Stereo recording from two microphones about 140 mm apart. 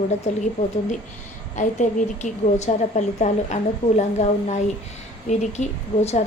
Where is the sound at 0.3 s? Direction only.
55° left (ahead or behind).